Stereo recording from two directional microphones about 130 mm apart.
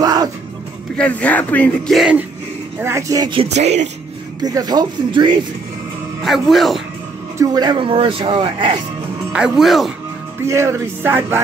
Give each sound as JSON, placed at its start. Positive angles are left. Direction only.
{"t": 0.0, "sound": "music", "side_deg": -30}
{"t": 0.9, "sound": "speech", "side_deg": 10}
{"t": 2.0, "sound": "speech", "side_deg": -5}
{"t": 2.8, "sound": "music", "side_deg": -20}
{"t": 3.5, "sound": "speech", "side_deg": -60}
{"t": 4.4, "sound": "speech", "side_deg": -30}
{"t": 6.2, "sound": "speech", "side_deg": 0}
{"t": 7.3, "sound": "speech", "side_deg": -30}
{"t": 9.3, "sound": "speech", "side_deg": -5}
{"t": 10.4, "sound": "music", "side_deg": -20}